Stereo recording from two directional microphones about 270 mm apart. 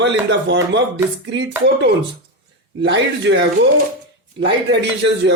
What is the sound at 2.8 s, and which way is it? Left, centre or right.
Speech, right.